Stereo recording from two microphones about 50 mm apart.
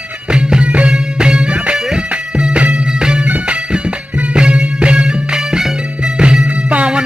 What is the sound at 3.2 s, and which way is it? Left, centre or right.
Music, right.